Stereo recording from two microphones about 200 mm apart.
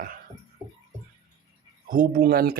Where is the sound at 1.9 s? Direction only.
45° right (ahead or behind).